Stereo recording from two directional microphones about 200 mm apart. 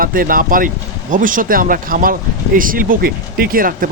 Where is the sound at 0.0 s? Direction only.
45° right (ahead or behind).